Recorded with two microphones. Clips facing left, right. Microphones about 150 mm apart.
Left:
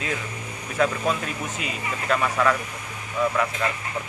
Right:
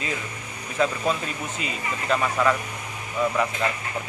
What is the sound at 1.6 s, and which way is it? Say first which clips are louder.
Speech: even; 60° left (ahead or behind).